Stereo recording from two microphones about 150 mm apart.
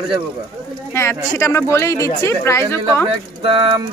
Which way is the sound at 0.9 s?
20° left (ahead or behind).